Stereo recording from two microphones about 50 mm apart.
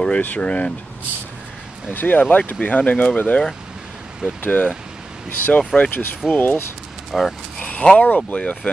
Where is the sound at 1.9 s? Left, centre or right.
Left.